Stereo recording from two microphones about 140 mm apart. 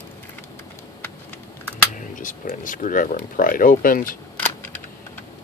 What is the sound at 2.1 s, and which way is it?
Speech, 70° left (ahead or behind).